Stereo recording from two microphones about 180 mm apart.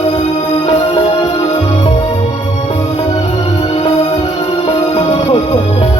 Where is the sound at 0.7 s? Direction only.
25° left (ahead or behind).